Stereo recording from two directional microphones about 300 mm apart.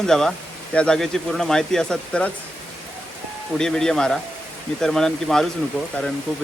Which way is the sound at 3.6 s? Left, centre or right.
Centre.